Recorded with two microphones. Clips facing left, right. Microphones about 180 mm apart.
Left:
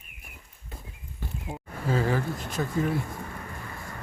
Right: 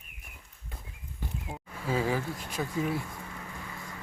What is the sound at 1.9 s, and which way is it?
Speech, 10° right (ahead or behind).